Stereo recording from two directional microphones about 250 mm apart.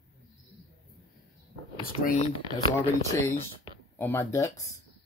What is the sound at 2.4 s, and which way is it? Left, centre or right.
Speech, centre.